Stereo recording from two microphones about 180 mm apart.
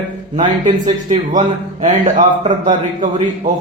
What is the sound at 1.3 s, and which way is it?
Speech, 45° right (ahead or behind).